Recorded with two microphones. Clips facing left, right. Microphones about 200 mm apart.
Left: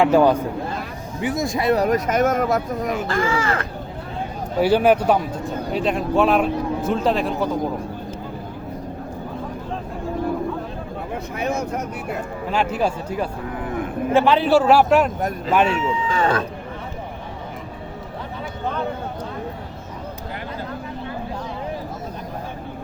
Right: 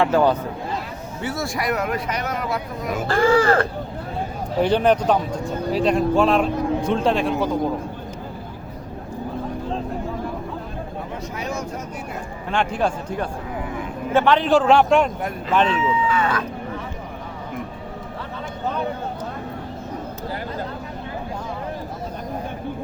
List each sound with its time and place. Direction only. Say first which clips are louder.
0.0 s a man's voice: left 3 dB; 15° left (ahead or behind); by 2.9 s 45° left (ahead or behind)
3.1 s speech: right 9 dB; 35° right (ahead or behind)
4.6 s speech: left 2 dB; 5° left (ahead or behind)
11.3 s vehicle: left 5 dB; 55° left (ahead or behind)
12.5 s a man's voice: even; 5° left (ahead or behind)
13.6 s cattle: left 4 dB; 55° left (ahead or behind)
14.1 s a man's voice: left 1 dB; 10° left (ahead or behind)
16.0 s speech: left 1 dB; 30° left (ahead or behind)